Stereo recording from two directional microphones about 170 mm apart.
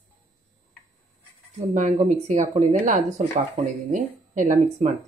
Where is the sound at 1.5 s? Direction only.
45° right (ahead or behind).